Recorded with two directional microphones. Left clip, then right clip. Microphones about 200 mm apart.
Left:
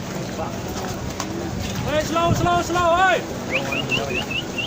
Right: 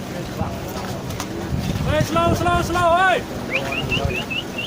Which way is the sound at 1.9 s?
20° right (ahead or behind).